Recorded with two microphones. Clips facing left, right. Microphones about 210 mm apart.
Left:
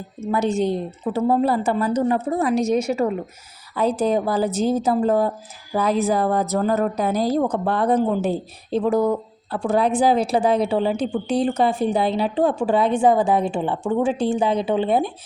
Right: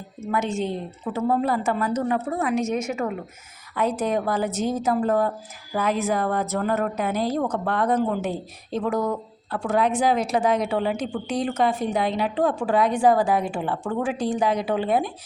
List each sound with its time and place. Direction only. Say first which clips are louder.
0.3 s speech: left 5 dB; 35° left (ahead or behind)